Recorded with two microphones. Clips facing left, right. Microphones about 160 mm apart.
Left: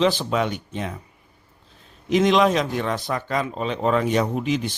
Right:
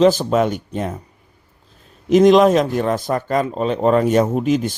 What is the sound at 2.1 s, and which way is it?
Speech, 45° right (ahead or behind).